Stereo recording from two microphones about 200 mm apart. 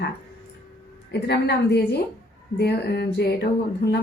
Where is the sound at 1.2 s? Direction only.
55° left (ahead or behind).